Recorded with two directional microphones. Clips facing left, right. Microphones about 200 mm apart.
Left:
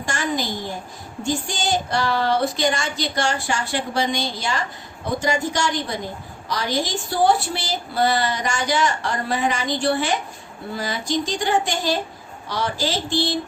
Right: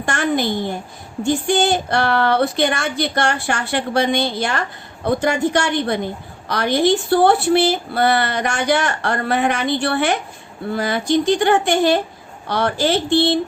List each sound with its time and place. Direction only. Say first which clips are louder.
0.0 s a woman's voice: right 5 dB; 60° right (ahead or behind)